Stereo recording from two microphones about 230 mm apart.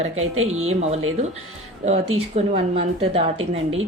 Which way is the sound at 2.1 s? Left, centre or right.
Right.